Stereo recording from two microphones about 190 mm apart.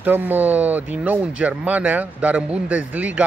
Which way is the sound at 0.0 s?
10° right (ahead or behind).